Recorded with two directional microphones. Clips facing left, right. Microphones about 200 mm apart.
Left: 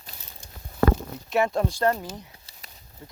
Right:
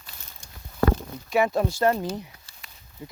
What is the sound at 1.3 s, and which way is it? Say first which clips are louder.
Speech: right 1 dB; 5° right (ahead or behind).